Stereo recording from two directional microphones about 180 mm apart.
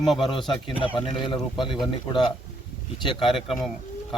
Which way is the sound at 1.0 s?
25° left (ahead or behind).